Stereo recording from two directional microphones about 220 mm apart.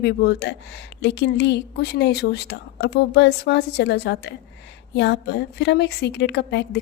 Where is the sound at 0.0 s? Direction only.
50° left (ahead or behind).